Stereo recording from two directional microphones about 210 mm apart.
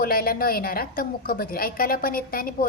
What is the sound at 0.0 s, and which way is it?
A woman's voice, 45° left (ahead or behind).